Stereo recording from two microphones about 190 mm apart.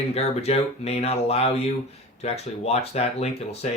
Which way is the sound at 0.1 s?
30° left (ahead or behind).